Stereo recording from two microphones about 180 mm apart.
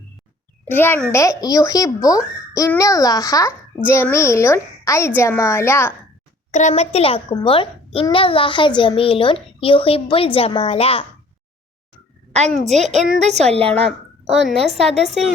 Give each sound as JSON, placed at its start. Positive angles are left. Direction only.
{"t": 0.7, "sound": "a woman's voice", "side_deg": 10}
{"t": 6.5, "sound": "a child's voice", "side_deg": 40}
{"t": 12.5, "sound": "a woman's voice", "side_deg": 0}
{"t": 12.7, "sound": "speech", "side_deg": -40}
{"t": 14.8, "sound": "a woman's voice", "side_deg": 0}